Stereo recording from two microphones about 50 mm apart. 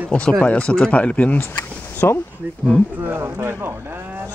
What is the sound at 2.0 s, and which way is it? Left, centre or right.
Speech, left.